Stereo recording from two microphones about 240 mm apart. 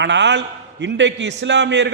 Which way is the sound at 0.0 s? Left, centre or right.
Right.